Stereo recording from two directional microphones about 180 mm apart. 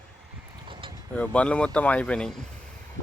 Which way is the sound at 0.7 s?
30° right (ahead or behind).